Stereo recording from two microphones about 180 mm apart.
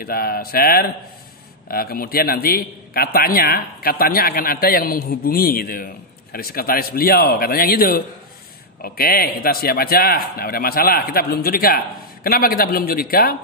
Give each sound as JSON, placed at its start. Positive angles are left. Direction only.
{"t": 0.0, "sound": "speech", "side_deg": 55}